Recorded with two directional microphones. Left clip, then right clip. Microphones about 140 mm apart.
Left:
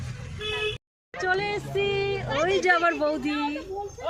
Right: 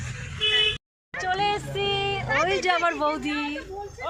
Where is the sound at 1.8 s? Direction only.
70° right (ahead or behind).